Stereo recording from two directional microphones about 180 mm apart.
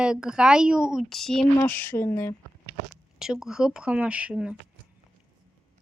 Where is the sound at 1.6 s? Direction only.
10° left (ahead or behind).